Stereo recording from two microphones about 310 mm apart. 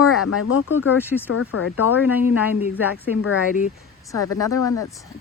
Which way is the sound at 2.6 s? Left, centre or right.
Left.